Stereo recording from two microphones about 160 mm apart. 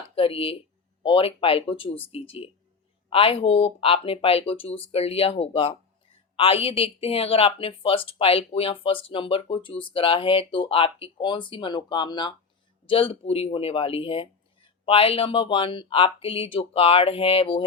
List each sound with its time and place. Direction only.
0.2 s speech: 35° left (ahead or behind)